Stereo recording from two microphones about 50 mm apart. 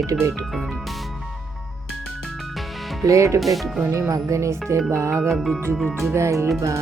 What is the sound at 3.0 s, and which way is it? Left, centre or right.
Speech, right.